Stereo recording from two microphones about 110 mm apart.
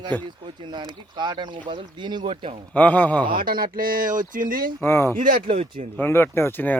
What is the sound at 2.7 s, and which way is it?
Speech, 15° left (ahead or behind).